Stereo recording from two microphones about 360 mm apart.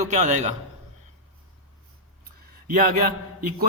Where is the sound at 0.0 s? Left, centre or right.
Centre.